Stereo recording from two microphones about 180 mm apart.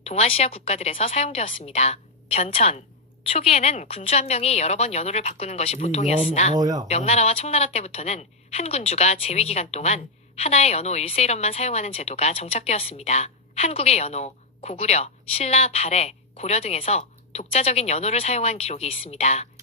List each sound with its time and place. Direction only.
0.0 s a woman's voice: 35° left (ahead or behind)
6.5 s speech: 20° right (ahead or behind)
6.8 s a woman's voice: 35° left (ahead or behind)